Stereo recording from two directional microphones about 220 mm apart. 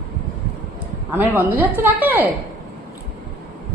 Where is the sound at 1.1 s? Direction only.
10° right (ahead or behind).